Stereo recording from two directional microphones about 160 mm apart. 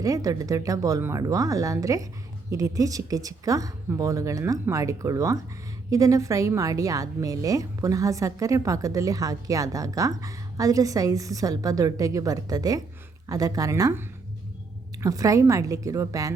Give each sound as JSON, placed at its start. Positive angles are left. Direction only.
{"t": 0.0, "sound": "a woman's voice", "side_deg": -20}
{"t": 15.0, "sound": "a woman's voice", "side_deg": -20}